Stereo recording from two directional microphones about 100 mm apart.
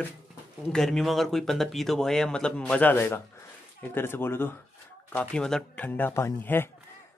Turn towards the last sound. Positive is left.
turn(degrees=25)  # may be behind; listen again after turning